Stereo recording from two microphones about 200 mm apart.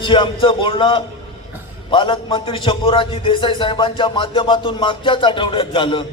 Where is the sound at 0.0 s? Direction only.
25° left (ahead or behind).